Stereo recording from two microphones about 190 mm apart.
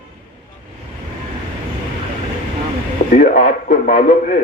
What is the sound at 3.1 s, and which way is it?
A man's voice, 50° left (ahead or behind).